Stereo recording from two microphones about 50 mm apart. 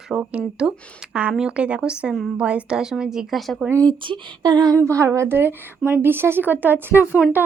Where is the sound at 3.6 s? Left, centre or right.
Right.